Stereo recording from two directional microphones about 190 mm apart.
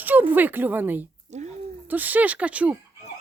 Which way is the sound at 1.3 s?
35° right (ahead or behind).